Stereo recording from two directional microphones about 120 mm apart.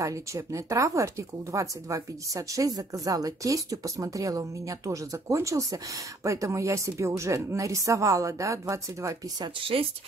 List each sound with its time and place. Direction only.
0.0 s speech: 25° right (ahead or behind)
9.4 s speech: 50° right (ahead or behind)